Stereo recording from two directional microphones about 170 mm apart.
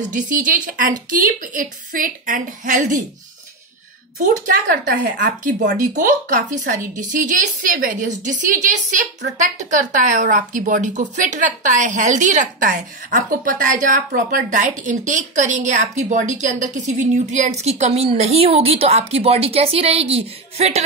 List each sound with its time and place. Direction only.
0.1 s a woman's voice: 50° right (ahead or behind)
4.2 s a woman's voice: 50° right (ahead or behind)